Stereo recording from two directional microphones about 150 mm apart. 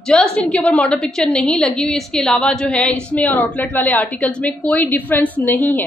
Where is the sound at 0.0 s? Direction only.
5° left (ahead or behind).